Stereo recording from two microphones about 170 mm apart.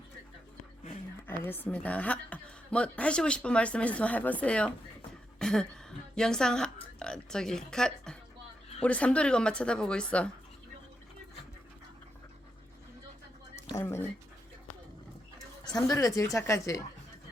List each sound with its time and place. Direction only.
1.4 s a woman's voice: 10° left (ahead or behind)
13.7 s a woman's voice: 15° left (ahead or behind)
15.6 s a woman's voice: 20° left (ahead or behind)